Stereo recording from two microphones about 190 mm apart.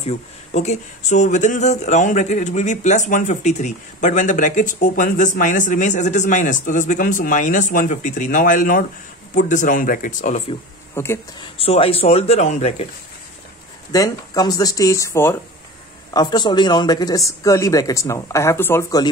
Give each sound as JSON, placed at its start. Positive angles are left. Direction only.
{"t": 0.0, "sound": "speech", "side_deg": 35}
{"t": 11.0, "sound": "speech", "side_deg": 15}
{"t": 11.5, "sound": "speech", "side_deg": 30}
{"t": 13.9, "sound": "speech", "side_deg": 20}